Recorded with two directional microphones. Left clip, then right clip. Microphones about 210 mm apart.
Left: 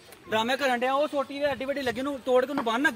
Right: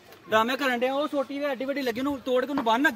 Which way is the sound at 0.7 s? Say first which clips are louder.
Left 1 dB; 25° right (ahead or behind).